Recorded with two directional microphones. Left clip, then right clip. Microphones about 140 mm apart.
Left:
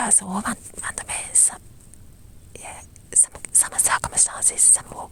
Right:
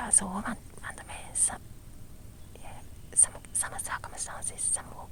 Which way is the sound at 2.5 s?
35° left (ahead or behind).